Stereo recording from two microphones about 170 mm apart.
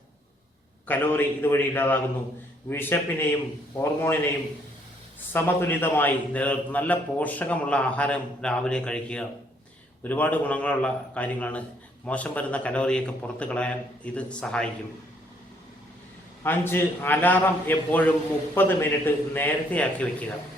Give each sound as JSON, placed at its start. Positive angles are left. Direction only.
{"t": 0.9, "sound": "a man's voice", "side_deg": 10}
{"t": 5.3, "sound": "a man's voice", "side_deg": 15}
{"t": 16.4, "sound": "a man's voice", "side_deg": 15}